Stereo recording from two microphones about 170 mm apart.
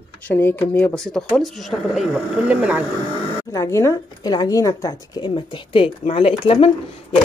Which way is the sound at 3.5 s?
15° left (ahead or behind).